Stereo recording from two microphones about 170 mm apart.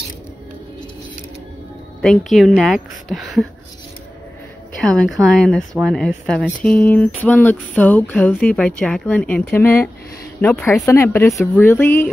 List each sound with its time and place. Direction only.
2.0 s speech: centre (ahead or behind)
4.8 s a woman's voice: centre (ahead or behind)
10.4 s a woman's voice: 5° left (ahead or behind)